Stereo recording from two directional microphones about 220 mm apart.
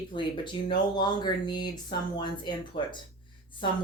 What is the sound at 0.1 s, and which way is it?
Speech, 20° left (ahead or behind).